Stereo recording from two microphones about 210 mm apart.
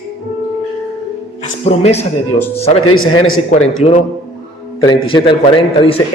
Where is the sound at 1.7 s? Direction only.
30° left (ahead or behind).